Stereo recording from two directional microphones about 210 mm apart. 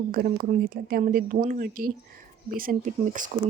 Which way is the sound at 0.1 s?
45° right (ahead or behind).